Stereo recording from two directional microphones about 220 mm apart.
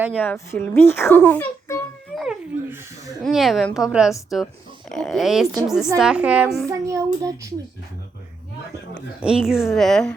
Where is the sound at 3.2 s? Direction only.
Centre (ahead or behind).